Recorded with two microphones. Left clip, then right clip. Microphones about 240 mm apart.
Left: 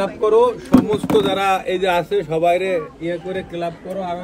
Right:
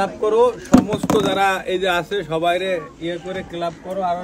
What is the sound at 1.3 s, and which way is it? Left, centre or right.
A man's voice, centre.